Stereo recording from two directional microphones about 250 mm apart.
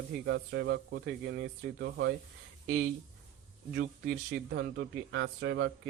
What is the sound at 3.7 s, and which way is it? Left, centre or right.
Speech, right.